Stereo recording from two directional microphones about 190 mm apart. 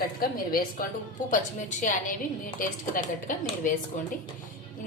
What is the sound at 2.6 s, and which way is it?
A woman's voice, 45° left (ahead or behind).